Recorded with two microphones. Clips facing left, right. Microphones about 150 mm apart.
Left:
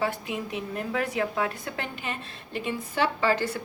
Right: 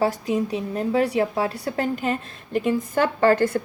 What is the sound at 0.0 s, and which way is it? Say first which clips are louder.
A woman's voice: right 7 dB; 40° right (ahead or behind).